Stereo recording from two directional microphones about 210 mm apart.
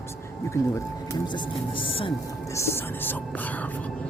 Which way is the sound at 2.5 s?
10° left (ahead or behind).